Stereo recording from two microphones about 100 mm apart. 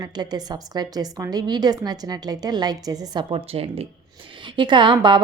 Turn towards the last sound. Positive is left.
turn(degrees=-55)  # may be behind; listen again after turning